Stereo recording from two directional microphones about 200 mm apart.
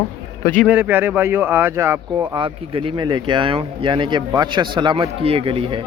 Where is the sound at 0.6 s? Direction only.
10° right (ahead or behind).